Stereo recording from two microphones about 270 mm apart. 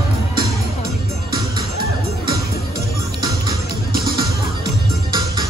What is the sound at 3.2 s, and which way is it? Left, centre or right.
Music, centre.